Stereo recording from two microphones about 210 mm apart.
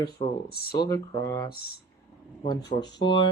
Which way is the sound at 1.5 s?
45° left (ahead or behind).